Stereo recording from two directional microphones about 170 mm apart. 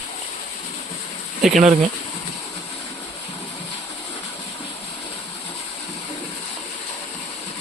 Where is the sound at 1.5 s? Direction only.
40° right (ahead or behind).